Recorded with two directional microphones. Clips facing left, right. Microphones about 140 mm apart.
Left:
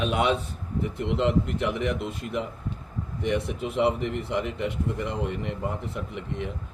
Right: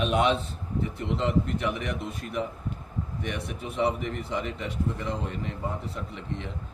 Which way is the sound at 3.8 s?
70° left (ahead or behind).